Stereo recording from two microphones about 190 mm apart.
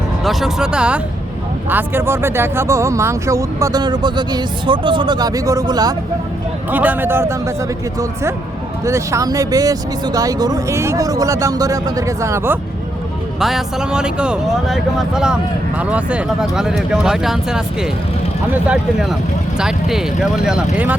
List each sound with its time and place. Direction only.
0.3 s speech: centre (ahead or behind); by 5.9 s 20° right (ahead or behind)
6.7 s speech: 10° right (ahead or behind)
8.8 s speech: 15° right (ahead or behind)
13.4 s speech: centre (ahead or behind)
18.7 s speech: 5° right (ahead or behind)